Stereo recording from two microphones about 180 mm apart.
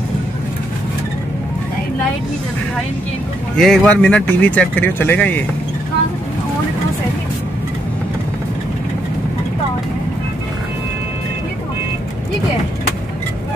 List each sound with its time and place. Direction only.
3.5 s speech: 5° left (ahead or behind)